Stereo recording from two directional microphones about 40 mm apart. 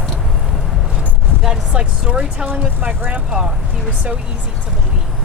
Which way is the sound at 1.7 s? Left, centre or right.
Right.